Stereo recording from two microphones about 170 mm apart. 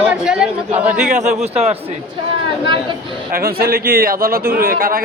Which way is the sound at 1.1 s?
45° right (ahead or behind).